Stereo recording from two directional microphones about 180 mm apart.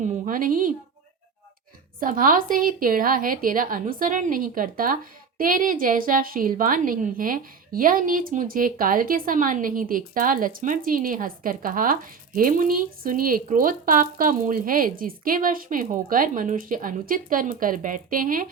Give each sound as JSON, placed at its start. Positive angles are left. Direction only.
{"t": 0.0, "sound": "a woman's voice", "side_deg": -45}
{"t": 2.0, "sound": "a woman's voice", "side_deg": -50}